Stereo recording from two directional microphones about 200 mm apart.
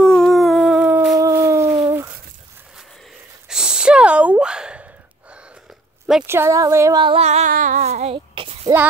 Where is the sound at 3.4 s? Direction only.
5° right (ahead or behind).